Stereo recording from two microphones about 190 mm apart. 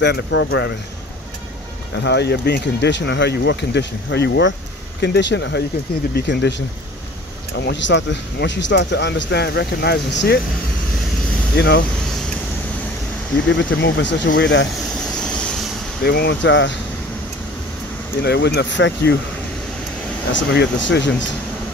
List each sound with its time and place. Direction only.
0.0 s speech: 75° left (ahead or behind)
2.0 s speech: 65° left (ahead or behind)
7.6 s speech: 70° left (ahead or behind)
11.5 s speech: 65° left (ahead or behind)
13.5 s speech: 75° left (ahead or behind)
16.0 s speech: 60° left (ahead or behind)
18.2 s speech: 60° left (ahead or behind)
20.3 s speech: 70° left (ahead or behind)